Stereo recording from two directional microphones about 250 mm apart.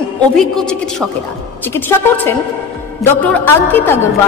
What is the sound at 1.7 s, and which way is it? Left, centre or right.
Music, centre.